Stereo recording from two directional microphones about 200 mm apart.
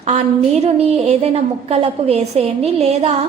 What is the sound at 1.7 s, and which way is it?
A woman's voice, 30° right (ahead or behind).